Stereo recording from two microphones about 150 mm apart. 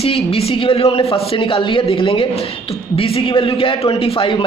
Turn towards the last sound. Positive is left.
turn(degrees=35)  # may be behind; listen again after turning